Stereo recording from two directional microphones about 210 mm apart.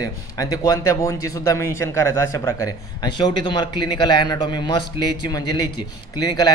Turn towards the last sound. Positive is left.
turn(degrees=20)  # may be behind; listen again after turning